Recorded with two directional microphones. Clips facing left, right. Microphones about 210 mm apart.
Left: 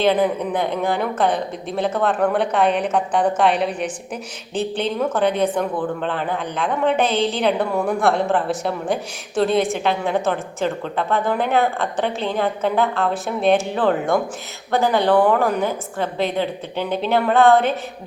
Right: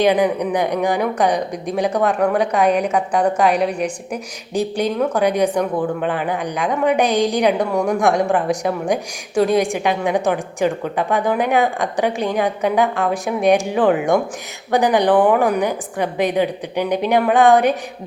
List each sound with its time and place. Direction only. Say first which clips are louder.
0.0 s a woman's voice: right 2 dB; 15° right (ahead or behind)